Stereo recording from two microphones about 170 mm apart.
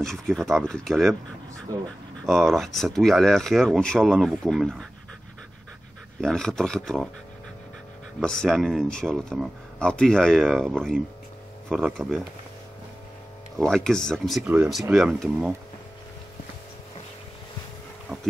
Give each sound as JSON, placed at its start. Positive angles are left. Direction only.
{"t": 0.0, "sound": "speech", "side_deg": 0}
{"t": 1.7, "sound": "speech", "side_deg": -20}
{"t": 2.2, "sound": "speech", "side_deg": 0}
{"t": 6.2, "sound": "speech", "side_deg": 5}
{"t": 8.2, "sound": "speech", "side_deg": 5}
{"t": 13.6, "sound": "speech", "side_deg": 0}